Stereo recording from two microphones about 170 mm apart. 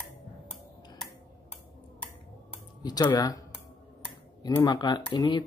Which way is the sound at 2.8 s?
25° left (ahead or behind).